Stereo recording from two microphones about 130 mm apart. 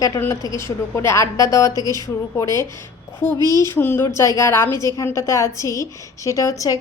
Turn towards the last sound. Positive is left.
turn(degrees=25)  # may be behind; listen again after turning